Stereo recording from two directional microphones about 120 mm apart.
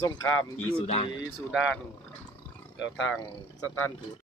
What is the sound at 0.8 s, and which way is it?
Speech, 60° left (ahead or behind).